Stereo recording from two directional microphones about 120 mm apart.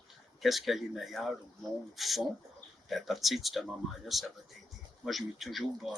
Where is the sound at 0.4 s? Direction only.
Centre (ahead or behind).